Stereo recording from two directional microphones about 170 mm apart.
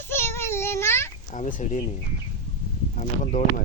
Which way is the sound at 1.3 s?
45° left (ahead or behind).